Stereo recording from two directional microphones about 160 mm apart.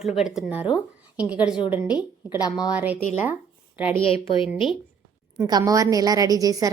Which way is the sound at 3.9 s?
35° left (ahead or behind).